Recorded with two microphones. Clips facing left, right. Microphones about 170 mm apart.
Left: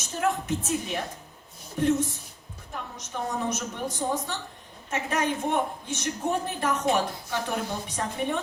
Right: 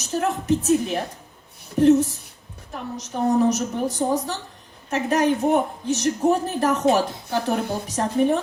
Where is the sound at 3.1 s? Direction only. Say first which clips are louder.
Right 11 dB; 40° right (ahead or behind).